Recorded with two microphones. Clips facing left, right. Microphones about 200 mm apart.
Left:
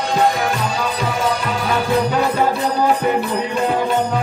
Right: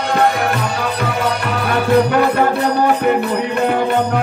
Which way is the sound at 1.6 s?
60° right (ahead or behind).